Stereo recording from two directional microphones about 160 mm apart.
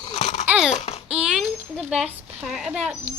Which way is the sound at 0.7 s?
40° left (ahead or behind).